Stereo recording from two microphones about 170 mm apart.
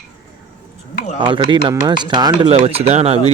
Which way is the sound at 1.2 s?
25° right (ahead or behind).